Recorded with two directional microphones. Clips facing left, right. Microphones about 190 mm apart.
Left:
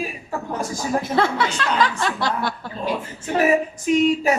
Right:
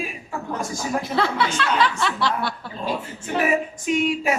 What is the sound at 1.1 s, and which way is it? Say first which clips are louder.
A woman's voice: even; 45° left (ahead or behind).